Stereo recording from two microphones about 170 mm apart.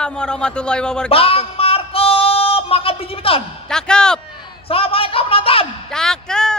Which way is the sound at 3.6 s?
5° left (ahead or behind).